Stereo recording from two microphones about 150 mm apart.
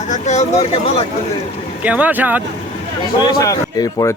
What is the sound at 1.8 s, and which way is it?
Speech, 10° right (ahead or behind).